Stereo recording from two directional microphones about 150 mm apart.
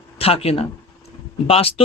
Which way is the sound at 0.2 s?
40° left (ahead or behind).